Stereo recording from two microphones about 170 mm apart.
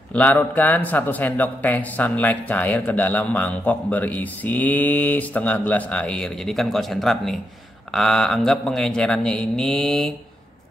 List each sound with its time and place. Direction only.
0.1 s a man's voice: 10° left (ahead or behind)